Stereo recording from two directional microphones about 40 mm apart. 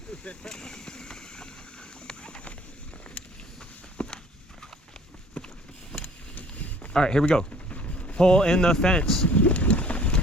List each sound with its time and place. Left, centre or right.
0.4 s vehicle: centre
2.0 s a sound: left
3.9 s walk: left
6.9 s speech: centre
7.5 s vehicle: left
8.2 s speech: left
9.2 s vehicle: left